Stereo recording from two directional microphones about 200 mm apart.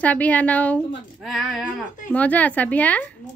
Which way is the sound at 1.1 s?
Centre (ahead or behind).